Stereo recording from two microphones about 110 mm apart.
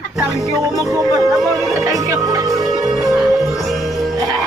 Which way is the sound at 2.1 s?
30° right (ahead or behind).